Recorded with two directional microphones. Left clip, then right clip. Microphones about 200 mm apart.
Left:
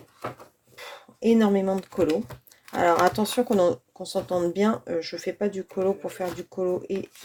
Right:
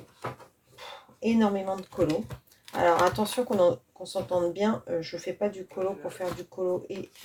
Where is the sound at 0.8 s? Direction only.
50° left (ahead or behind).